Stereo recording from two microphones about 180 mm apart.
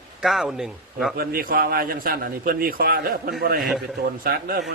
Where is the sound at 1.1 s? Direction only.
55° right (ahead or behind).